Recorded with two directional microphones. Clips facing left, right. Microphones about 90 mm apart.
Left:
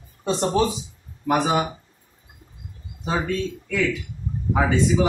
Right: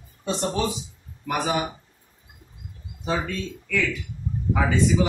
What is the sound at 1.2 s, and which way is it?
Speech, 25° left (ahead or behind).